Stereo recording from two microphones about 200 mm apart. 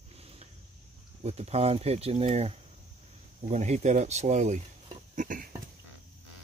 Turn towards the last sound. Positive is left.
turn(degrees=-45)  # may be behind; listen again after turning